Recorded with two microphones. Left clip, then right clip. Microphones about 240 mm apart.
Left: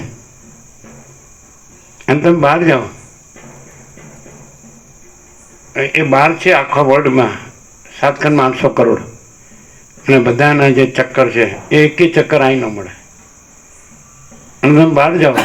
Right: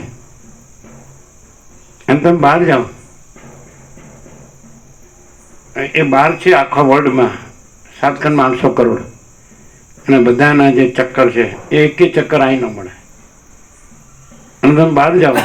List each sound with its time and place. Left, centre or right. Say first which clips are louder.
2.0 s a man's voice: right 1 dB; left
5.7 s a man's voice: even; left
14.6 s a man's voice: even; left